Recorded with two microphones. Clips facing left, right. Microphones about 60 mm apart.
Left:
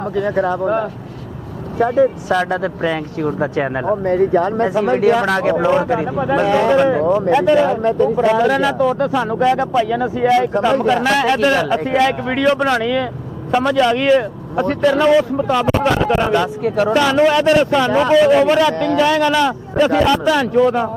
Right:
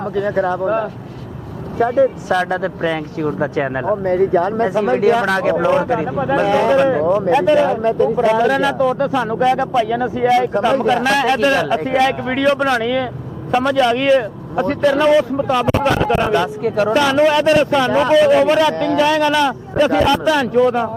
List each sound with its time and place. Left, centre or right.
0.0 s speech: centre